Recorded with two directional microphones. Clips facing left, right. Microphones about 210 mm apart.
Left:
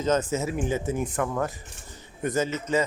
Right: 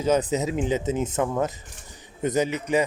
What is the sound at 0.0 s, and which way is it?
Speech, 15° right (ahead or behind).